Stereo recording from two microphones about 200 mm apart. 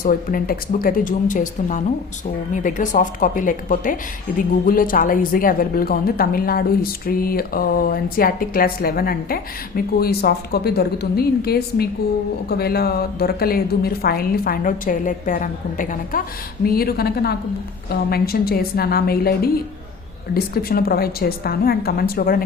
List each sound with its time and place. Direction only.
0.0 s speech: 45° left (ahead or behind)